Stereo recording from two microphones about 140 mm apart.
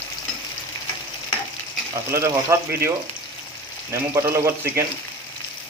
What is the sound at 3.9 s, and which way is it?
Speech, 20° right (ahead or behind).